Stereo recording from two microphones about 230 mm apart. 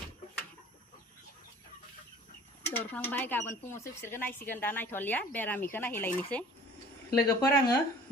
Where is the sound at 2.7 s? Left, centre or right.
Centre.